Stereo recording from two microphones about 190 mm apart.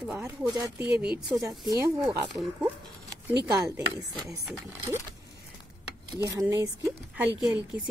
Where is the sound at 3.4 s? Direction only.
20° right (ahead or behind).